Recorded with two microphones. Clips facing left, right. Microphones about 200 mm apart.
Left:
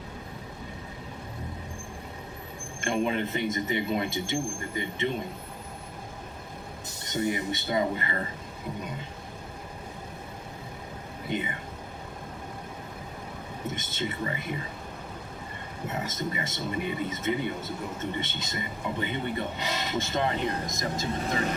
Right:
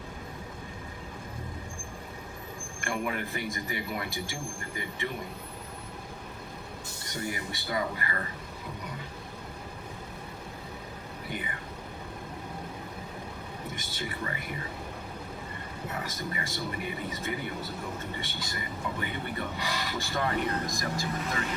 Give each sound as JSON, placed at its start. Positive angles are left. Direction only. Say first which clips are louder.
{"t": 2.8, "sound": "speech", "louder": "left 6 dB", "side_deg": 20}
{"t": 7.0, "sound": "speech", "louder": "left 7 dB", "side_deg": 20}
{"t": 11.3, "sound": "speech", "louder": "left 7 dB", "side_deg": 20}
{"t": 13.7, "sound": "speech", "louder": "left 6 dB", "side_deg": 20}
{"t": 15.9, "sound": "speech", "louder": "left 4 dB", "side_deg": 20}